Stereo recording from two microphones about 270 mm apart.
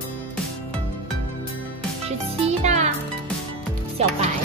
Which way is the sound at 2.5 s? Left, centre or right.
Right.